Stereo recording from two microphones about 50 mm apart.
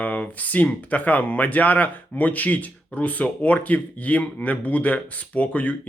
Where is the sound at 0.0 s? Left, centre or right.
Left.